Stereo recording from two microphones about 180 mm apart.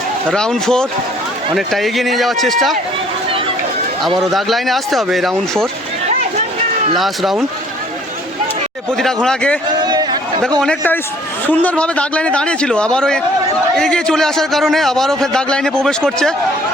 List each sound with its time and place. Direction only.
0.3 s a man's voice: 5° left (ahead or behind)
4.2 s a man's voice: centre (ahead or behind)
6.9 s a man's voice: centre (ahead or behind)
9.2 s a man's voice: 5° left (ahead or behind)
9.8 s a sound: 25° right (ahead or behind)
10.6 s a man's voice: 5° left (ahead or behind)